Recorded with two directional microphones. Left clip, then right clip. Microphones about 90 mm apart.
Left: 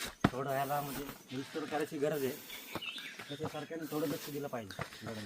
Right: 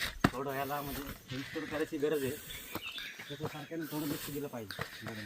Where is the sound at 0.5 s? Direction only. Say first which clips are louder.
Left 2 dB; 40° left (ahead or behind).